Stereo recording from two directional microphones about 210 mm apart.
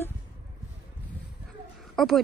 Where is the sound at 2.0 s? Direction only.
Centre (ahead or behind).